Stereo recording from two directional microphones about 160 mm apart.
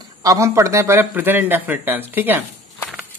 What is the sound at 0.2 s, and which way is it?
Speech, 20° right (ahead or behind).